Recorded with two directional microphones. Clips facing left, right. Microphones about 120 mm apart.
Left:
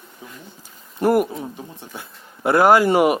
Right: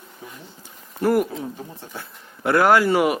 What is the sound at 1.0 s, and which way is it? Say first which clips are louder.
Speech: left 2 dB; 15° left (ahead or behind).